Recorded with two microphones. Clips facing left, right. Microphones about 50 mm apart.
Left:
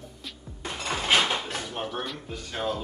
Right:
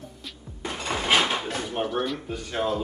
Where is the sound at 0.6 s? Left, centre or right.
Centre.